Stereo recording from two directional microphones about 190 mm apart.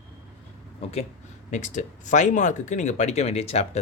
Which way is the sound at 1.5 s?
40° left (ahead or behind).